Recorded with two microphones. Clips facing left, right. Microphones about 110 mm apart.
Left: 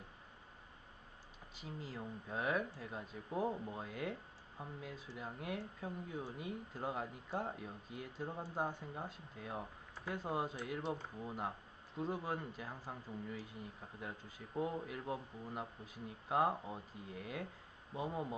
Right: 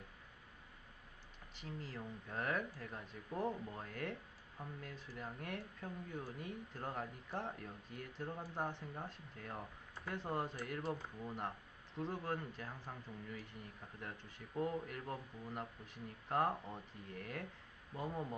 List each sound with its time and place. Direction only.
1.5 s speech: 5° left (ahead or behind)